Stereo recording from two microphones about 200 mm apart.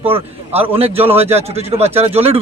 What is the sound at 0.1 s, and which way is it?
A man's voice, 30° right (ahead or behind).